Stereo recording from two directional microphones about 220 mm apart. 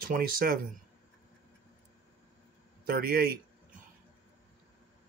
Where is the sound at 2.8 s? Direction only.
40° right (ahead or behind).